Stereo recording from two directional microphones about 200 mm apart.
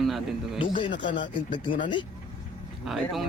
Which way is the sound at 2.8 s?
Centre (ahead or behind).